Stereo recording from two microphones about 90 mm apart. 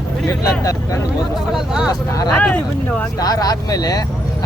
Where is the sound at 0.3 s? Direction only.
40° left (ahead or behind).